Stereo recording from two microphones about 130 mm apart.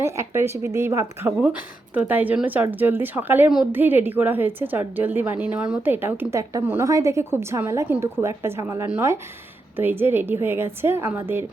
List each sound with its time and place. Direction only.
0.0 s a woman's voice: 20° right (ahead or behind)